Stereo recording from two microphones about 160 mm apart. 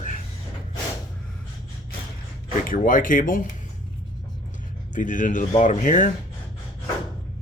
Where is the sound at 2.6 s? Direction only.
55° left (ahead or behind).